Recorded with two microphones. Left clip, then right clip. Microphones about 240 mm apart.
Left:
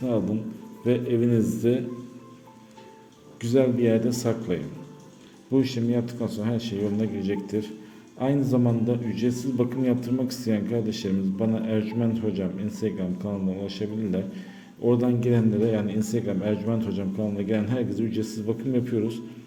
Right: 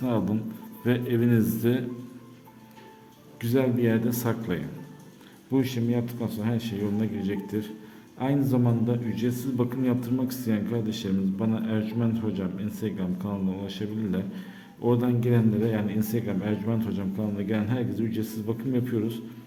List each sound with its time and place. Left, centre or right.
0.0 s a man's voice: centre
3.4 s a man's voice: centre